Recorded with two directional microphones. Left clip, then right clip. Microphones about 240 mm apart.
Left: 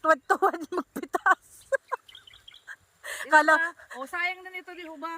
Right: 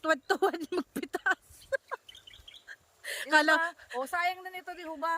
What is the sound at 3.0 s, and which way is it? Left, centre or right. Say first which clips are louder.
Speech: left 5 dB; centre.